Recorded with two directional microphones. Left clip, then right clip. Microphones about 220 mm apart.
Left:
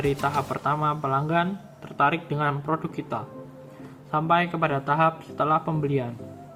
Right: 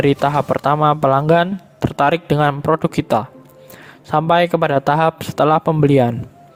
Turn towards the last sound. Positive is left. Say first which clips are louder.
# right 13 dB
turn(degrees=-50)  # may be behind; listen again after turning